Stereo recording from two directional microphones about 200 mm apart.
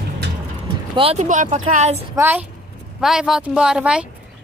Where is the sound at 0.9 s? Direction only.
30° right (ahead or behind).